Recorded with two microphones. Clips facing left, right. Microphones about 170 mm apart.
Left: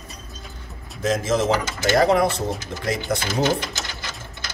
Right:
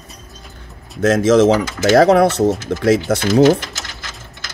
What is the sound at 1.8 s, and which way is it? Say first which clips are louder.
Speech: right 7 dB; 80° right.